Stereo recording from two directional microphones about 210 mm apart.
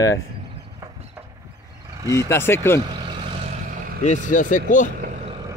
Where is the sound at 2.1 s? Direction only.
15° left (ahead or behind).